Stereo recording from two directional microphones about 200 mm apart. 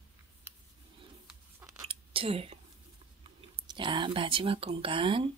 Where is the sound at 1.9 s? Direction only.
30° right (ahead or behind).